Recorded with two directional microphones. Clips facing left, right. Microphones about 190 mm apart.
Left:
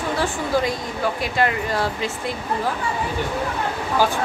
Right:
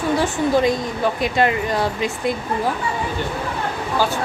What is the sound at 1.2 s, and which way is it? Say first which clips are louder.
Speech: right 4 dB; 20° right (ahead or behind).